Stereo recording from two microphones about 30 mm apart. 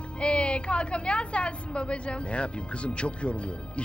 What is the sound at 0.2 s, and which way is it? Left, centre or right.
A woman's voice, left.